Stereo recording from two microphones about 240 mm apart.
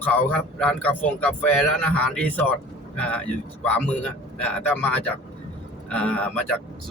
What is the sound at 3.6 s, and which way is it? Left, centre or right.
A man's voice, centre.